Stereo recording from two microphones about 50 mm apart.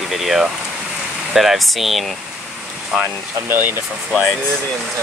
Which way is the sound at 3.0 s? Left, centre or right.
Right.